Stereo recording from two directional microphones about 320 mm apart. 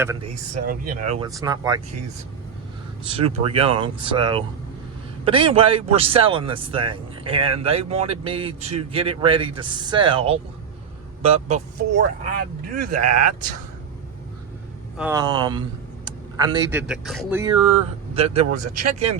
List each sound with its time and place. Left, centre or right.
0.0 s speech: centre
0.5 s speech: right
3.1 s speech: centre
13.0 s speech: right
14.9 s speech: centre
16.0 s vehicle: centre
16.8 s speech: centre; by 19.2 s right